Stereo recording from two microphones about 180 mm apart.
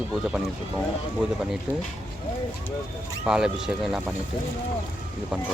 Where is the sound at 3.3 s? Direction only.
5° right (ahead or behind).